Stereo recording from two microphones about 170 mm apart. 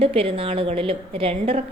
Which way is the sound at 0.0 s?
35° right (ahead or behind).